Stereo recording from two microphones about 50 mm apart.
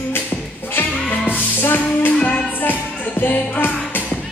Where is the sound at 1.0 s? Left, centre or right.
Left.